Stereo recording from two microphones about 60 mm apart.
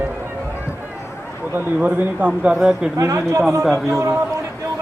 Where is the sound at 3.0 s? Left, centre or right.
Right.